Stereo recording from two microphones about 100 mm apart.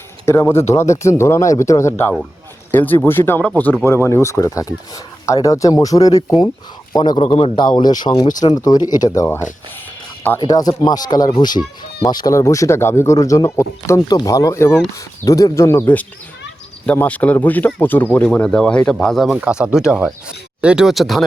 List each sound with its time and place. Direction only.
0.3 s speech: 25° left (ahead or behind); by 7.2 s 45° left (ahead or behind)
7.2 s a man's voice: 70° left (ahead or behind)
7.8 s speech: 45° left (ahead or behind)
10.4 s a man's voice: 40° left (ahead or behind); by 19.3 s 5° left (ahead or behind)
19.3 s speech: 10° right (ahead or behind)